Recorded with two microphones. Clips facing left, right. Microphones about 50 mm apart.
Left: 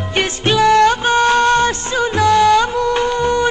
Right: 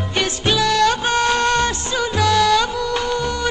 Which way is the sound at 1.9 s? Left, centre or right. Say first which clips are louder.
Left 4 dB; left.